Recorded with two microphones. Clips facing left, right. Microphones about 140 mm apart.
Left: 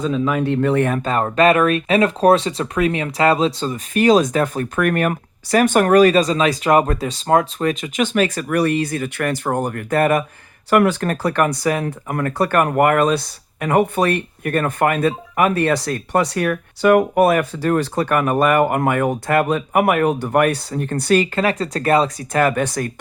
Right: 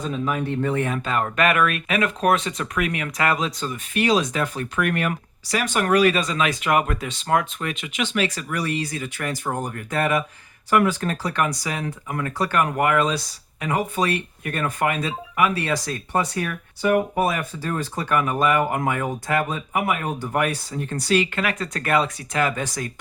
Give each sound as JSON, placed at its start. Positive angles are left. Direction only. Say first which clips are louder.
{"t": 0.3, "sound": "speech", "louder": "left 4 dB", "side_deg": 90}
{"t": 0.9, "sound": "speech", "louder": "left 6 dB", "side_deg": 35}
{"t": 10.7, "sound": "speech", "louder": "left 4 dB", "side_deg": 60}
{"t": 21.3, "sound": "speech", "louder": "left 6 dB", "side_deg": 35}
{"t": 22.3, "sound": "speech", "louder": "left 6 dB", "side_deg": 50}